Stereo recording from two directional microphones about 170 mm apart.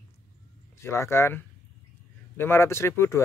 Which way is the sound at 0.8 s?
15° left (ahead or behind).